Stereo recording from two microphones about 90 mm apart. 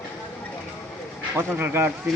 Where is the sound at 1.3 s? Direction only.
25° right (ahead or behind).